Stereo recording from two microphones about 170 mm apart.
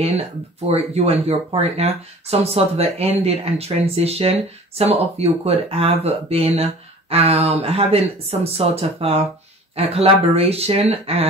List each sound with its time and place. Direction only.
0.7 s speech: 35° right (ahead or behind)